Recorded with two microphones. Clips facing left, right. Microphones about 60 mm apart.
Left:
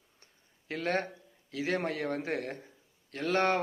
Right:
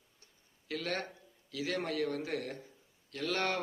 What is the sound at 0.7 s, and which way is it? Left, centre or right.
A man's voice, left.